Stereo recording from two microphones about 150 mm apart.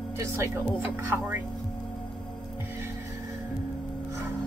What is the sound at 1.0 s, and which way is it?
Speech, 20° right (ahead or behind).